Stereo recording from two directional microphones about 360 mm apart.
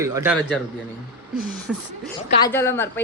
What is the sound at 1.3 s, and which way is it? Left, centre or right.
A woman's voice, centre.